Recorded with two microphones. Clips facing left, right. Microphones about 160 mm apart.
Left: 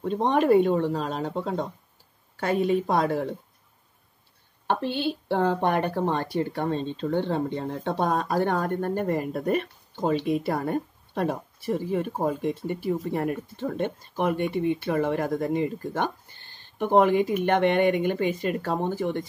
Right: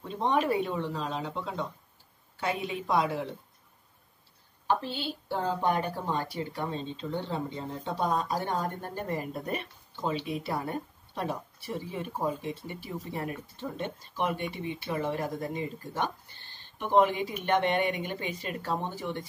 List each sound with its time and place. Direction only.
0.0 s speech: 55° left (ahead or behind)
4.6 s speech: 65° left (ahead or behind); by 19.2 s 45° left (ahead or behind)